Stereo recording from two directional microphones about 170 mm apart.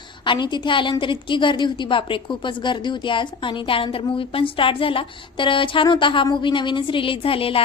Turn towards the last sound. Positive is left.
turn(degrees=35)  # may be behind; listen again after turning